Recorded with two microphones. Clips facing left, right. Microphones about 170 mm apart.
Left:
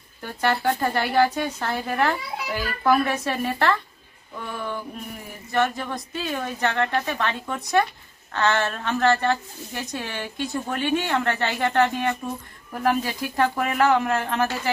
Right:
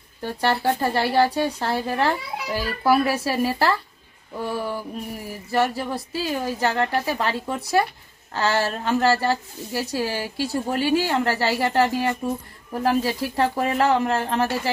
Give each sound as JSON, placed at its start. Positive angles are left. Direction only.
{"t": 0.2, "sound": "speech", "side_deg": -30}